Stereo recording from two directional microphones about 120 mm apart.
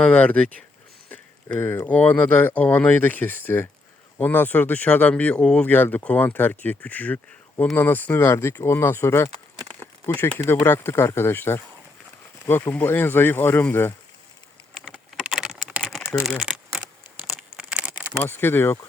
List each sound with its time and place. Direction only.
0.0 s speech: 10° left (ahead or behind)
14.8 s typing: 5° right (ahead or behind)
16.2 s speech: centre (ahead or behind)
17.6 s a sound: 5° right (ahead or behind)
18.3 s speech: 20° left (ahead or behind)